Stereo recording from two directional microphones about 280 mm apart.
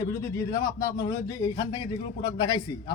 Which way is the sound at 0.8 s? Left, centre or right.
Centre.